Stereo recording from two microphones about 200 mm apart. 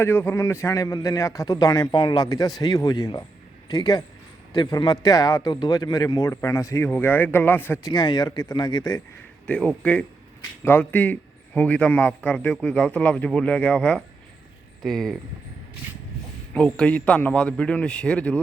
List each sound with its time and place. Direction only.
0.0 s a man's voice: 10° left (ahead or behind)
9.5 s a man's voice: 5° left (ahead or behind)
16.6 s a man's voice: 5° left (ahead or behind)